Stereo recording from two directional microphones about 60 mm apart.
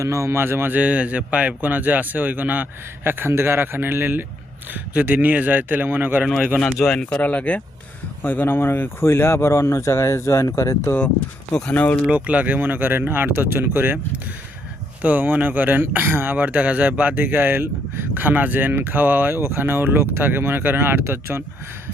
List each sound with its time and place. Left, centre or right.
0.0 s speech: right
0.7 s a man's voice: right
3.0 s a man's voice: right
6.7 s speech: centre
7.2 s speech: left
8.2 s speech: left
11.7 s speech: left
12.1 s speech: right
15.0 s speech: right